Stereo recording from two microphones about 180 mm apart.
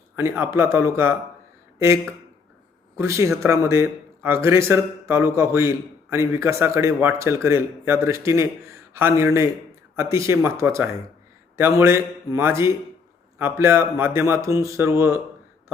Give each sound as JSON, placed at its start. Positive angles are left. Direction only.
{"t": 0.2, "sound": "speech", "side_deg": -15}